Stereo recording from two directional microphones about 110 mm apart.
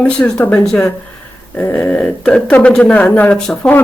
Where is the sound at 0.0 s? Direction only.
10° left (ahead or behind).